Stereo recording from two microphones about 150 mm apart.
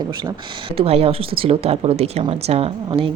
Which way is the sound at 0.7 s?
40° right (ahead or behind).